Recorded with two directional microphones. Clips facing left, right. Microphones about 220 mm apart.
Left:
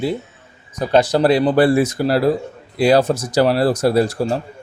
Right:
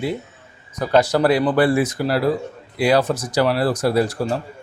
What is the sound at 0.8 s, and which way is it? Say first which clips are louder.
Speech: left 2 dB; 25° left (ahead or behind).